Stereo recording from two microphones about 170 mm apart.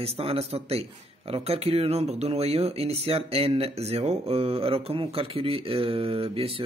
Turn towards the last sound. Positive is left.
turn(degrees=-35)  # may be behind; listen again after turning